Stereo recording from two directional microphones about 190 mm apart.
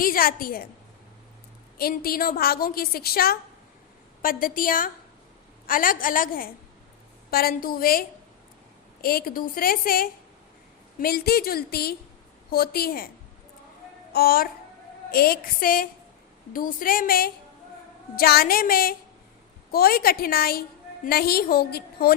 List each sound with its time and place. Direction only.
0.0 s a woman's voice: 50° left (ahead or behind)
1.8 s a woman's voice: 50° left (ahead or behind)
14.1 s a woman's voice: 55° left (ahead or behind)